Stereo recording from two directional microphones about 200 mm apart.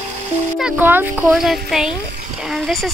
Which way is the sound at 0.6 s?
5° right (ahead or behind).